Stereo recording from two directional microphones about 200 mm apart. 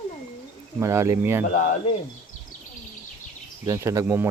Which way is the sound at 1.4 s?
40° left (ahead or behind).